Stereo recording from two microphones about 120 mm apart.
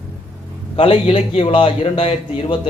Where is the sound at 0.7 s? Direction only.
50° left (ahead or behind).